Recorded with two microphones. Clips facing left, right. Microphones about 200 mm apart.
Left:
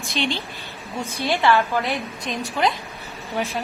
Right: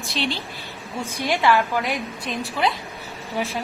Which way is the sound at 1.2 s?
15° right (ahead or behind).